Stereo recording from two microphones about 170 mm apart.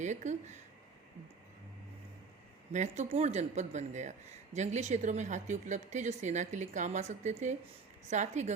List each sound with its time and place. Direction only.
0.0 s speech: 45° right (ahead or behind)
2.7 s speech: 45° right (ahead or behind)